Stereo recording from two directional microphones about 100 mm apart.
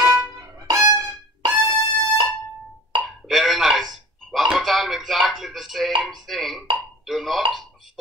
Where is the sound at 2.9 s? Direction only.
55° right (ahead or behind).